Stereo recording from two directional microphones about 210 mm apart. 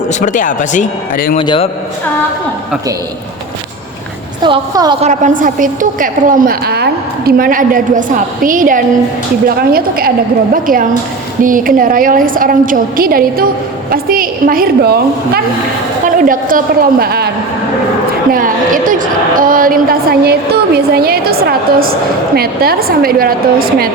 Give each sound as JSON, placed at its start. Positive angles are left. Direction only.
{"t": 0.1, "sound": "speech", "side_deg": 35}
{"t": 1.4, "sound": "a man's voice", "side_deg": 25}
{"t": 4.4, "sound": "a woman's voice", "side_deg": -20}
{"t": 4.9, "sound": "a woman's voice", "side_deg": -35}
{"t": 18.3, "sound": "a woman's voice", "side_deg": -40}